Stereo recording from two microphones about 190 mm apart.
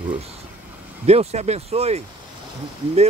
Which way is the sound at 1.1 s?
35° right (ahead or behind).